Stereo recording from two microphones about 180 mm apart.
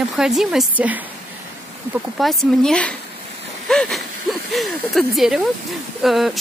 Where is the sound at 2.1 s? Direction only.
Centre (ahead or behind).